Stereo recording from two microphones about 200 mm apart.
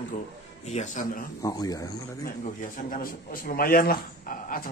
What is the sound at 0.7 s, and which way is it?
Speech, 40° left (ahead or behind).